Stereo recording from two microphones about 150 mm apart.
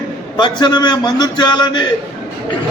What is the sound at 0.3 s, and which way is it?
A man's voice, 30° left (ahead or behind).